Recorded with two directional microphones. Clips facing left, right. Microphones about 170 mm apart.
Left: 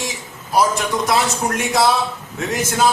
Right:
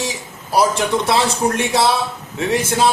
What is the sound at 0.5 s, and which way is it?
A man's voice, 30° right (ahead or behind).